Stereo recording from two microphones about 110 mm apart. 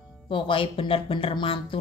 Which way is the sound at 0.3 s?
50° left (ahead or behind).